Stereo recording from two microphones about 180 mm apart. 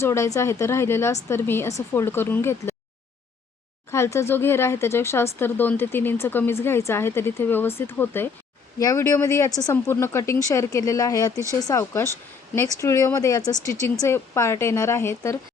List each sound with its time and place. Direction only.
0.0 s speech: 15° left (ahead or behind)
3.9 s speech: 15° left (ahead or behind)